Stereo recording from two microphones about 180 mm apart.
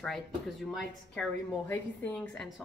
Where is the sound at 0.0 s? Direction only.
Centre (ahead or behind).